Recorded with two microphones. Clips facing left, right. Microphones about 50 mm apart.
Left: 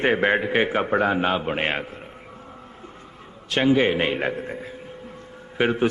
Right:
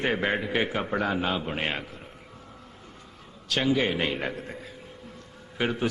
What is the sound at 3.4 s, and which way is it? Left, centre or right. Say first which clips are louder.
A man's voice: left 6 dB; left.